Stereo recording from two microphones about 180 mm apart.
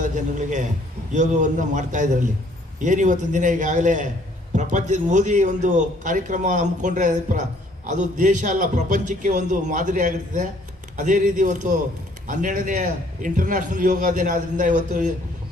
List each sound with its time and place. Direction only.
0.0 s a man's voice: 40° right (ahead or behind)